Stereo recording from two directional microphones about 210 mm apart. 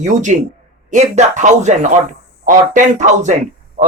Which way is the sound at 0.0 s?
35° right (ahead or behind).